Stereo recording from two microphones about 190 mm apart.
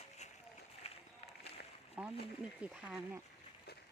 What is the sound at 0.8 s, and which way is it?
Run, 30° left (ahead or behind).